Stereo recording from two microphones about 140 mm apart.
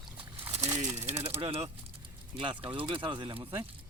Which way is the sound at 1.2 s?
45° right (ahead or behind).